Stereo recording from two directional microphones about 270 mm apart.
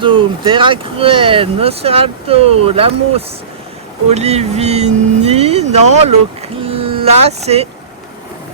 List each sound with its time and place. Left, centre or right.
0.0 s speech: centre